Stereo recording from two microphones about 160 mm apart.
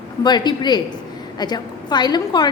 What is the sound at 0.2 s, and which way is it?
A woman's voice, 25° left (ahead or behind).